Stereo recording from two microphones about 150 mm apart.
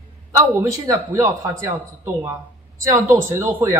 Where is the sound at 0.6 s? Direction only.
20° right (ahead or behind).